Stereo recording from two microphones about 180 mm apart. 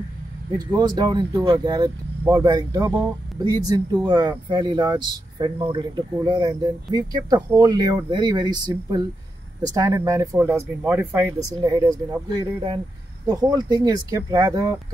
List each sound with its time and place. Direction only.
0.5 s speech: 20° right (ahead or behind)